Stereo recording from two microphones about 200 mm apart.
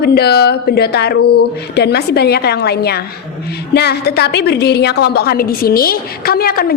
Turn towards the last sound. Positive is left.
turn(degrees=50)  # may be behind; listen again after turning